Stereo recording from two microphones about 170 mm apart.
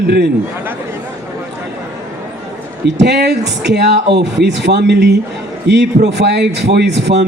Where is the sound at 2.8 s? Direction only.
80° right.